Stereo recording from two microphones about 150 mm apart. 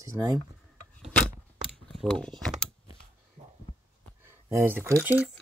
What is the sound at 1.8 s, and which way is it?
Speech, 5° left (ahead or behind).